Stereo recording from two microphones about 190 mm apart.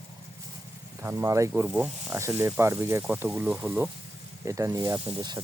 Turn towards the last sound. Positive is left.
turn(degrees=-20)  # may be behind; listen again after turning